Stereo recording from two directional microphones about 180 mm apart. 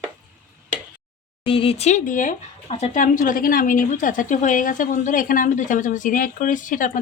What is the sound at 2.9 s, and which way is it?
A woman's voice, 45° left (ahead or behind).